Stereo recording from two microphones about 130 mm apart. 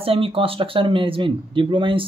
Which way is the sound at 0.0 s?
45° right (ahead or behind).